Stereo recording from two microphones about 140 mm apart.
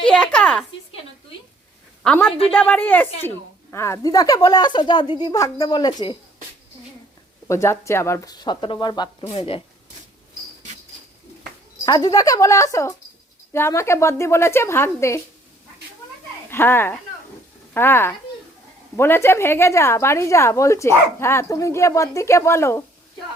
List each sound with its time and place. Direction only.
0.1 s a sound: 10° left (ahead or behind)
2.0 s a woman's voice: 5° left (ahead or behind); by 6.1 s 30° left (ahead or behind)
7.4 s speech: 20° left (ahead or behind)
11.9 s speech: 25° left (ahead or behind)
16.5 s speech: 15° left (ahead or behind)